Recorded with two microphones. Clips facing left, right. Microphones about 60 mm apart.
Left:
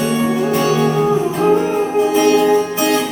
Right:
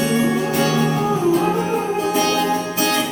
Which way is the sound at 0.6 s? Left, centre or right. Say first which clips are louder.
Left 5 dB; left.